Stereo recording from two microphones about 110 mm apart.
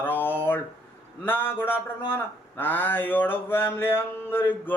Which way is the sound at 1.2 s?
20° left (ahead or behind).